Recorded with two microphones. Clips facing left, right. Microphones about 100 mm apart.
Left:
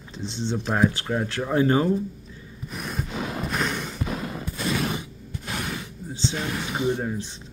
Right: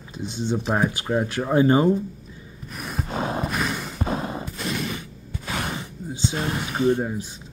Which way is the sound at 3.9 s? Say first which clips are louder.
Right 4 dB; 35° right (ahead or behind).